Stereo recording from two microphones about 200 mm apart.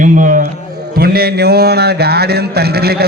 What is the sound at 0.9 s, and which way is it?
A man's voice, 50° right (ahead or behind).